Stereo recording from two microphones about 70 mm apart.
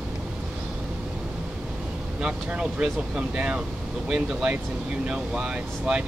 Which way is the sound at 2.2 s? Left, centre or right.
Centre.